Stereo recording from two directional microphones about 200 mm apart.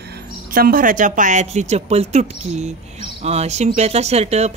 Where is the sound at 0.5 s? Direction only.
45° right (ahead or behind).